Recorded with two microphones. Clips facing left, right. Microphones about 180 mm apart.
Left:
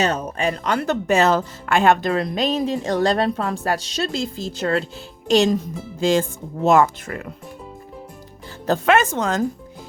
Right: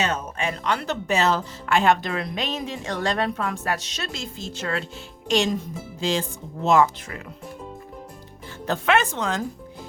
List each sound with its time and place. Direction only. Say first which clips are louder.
0.0 s speech: left 5 dB; 35° left (ahead or behind)
8.6 s speech: left 4 dB; 40° left (ahead or behind)